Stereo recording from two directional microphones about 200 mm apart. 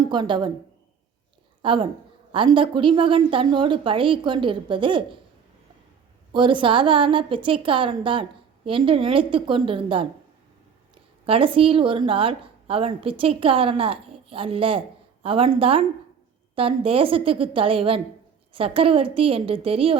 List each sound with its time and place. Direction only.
0.0 s a woman's voice: 20° right (ahead or behind)
1.6 s a woman's voice: 25° right (ahead or behind)
6.3 s a woman's voice: 25° right (ahead or behind)
11.3 s a woman's voice: 25° right (ahead or behind)